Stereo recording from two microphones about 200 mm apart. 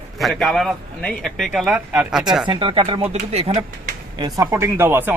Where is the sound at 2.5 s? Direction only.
25° right (ahead or behind).